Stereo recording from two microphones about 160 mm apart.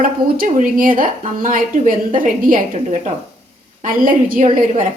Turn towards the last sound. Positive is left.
turn(degrees=-55)  # may be behind; listen again after turning